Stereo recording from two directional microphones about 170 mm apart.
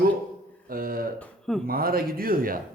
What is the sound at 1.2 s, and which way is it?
Speech, centre (ahead or behind).